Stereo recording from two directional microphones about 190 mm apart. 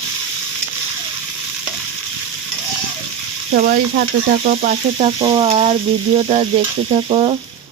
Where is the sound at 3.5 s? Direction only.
50° right (ahead or behind).